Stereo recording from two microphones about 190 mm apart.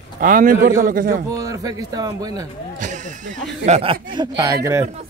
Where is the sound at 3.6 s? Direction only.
30° right (ahead or behind).